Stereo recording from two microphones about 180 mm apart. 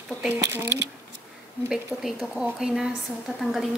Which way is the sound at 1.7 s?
Centre (ahead or behind).